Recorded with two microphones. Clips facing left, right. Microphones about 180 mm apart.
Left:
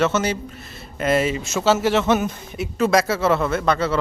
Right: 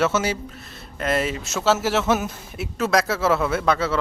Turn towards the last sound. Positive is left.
turn(degrees=-5)  # may be behind; listen again after turning